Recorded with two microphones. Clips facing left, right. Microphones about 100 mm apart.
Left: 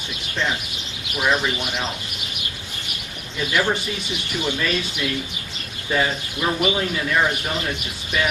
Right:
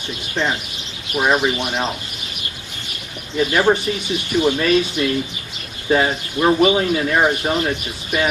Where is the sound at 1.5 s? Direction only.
25° right (ahead or behind).